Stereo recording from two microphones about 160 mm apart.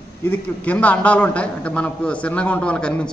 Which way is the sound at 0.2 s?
10° left (ahead or behind).